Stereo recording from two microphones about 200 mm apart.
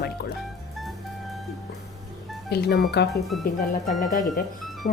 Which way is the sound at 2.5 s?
50° left (ahead or behind).